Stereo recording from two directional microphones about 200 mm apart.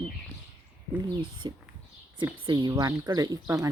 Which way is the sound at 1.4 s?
20° right (ahead or behind).